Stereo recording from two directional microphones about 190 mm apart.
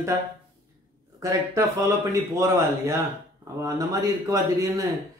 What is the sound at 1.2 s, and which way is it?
A man's voice, 15° right (ahead or behind).